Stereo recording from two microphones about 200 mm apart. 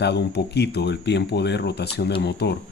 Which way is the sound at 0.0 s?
55° left (ahead or behind).